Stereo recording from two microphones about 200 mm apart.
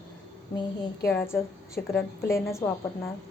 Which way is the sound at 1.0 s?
10° left (ahead or behind).